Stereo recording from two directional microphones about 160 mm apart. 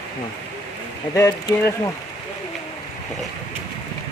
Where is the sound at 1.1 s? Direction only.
20° left (ahead or behind).